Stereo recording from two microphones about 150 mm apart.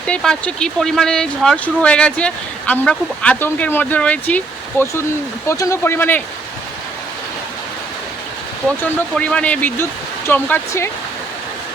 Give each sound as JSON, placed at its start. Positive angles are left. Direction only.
{"t": 0.1, "sound": "speech", "side_deg": 5}
{"t": 8.8, "sound": "speech", "side_deg": 10}